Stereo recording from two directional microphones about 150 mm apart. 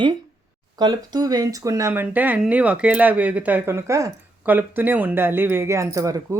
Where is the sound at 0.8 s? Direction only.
25° right (ahead or behind).